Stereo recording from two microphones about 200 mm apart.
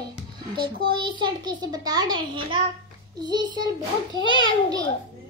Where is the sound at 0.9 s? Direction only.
25° right (ahead or behind).